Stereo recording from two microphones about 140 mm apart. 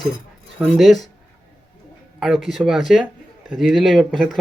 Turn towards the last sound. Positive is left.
turn(degrees=5)  # may be behind; listen again after turning